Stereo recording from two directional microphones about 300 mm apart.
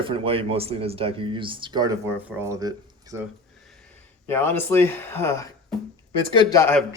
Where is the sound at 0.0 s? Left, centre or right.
Centre.